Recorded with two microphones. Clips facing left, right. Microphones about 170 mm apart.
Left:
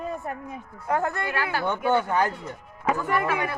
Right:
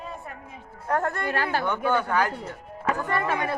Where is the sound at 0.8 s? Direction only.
5° left (ahead or behind).